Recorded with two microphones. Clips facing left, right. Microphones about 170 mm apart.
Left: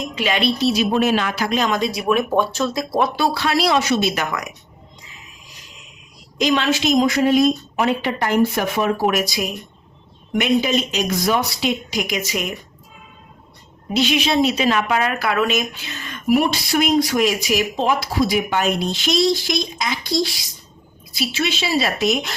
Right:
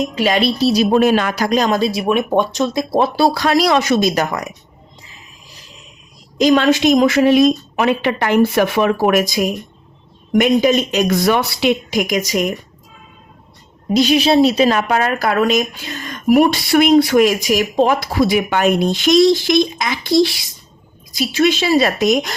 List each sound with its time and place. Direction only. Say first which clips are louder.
0.2 s a woman's voice: right 3 dB; 35° right (ahead or behind)
3.2 s a woman's voice: right 5 dB; 40° right (ahead or behind)
6.4 s a woman's voice: right 6 dB; 40° right (ahead or behind)
13.9 s a woman's voice: right 6 dB; 40° right (ahead or behind); by 20.3 s 65° right (ahead or behind)
21.1 s a woman's voice: right 8 dB; 45° right (ahead or behind)